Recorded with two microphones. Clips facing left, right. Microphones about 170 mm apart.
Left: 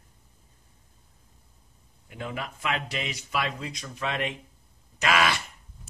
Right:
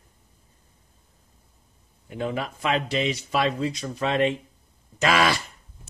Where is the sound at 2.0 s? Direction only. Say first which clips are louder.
Right 7 dB; 30° right (ahead or behind).